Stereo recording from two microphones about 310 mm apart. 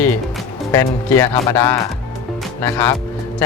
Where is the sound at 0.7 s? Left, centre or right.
Centre.